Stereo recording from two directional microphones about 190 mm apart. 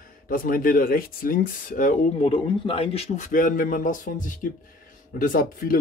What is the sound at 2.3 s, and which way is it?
A man's voice, 30° left (ahead or behind).